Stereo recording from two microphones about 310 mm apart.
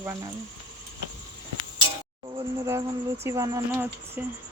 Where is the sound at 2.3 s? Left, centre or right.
Centre.